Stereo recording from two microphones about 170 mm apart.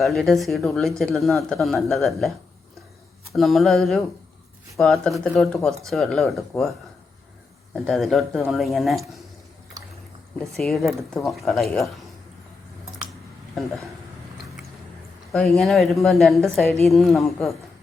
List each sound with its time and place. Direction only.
0.0 s speech: centre (ahead or behind)
3.3 s speech: centre (ahead or behind)
7.7 s speech: centre (ahead or behind)
9.8 s a sound: 20° right (ahead or behind)
10.4 s speech: centre (ahead or behind)
15.3 s speech: centre (ahead or behind)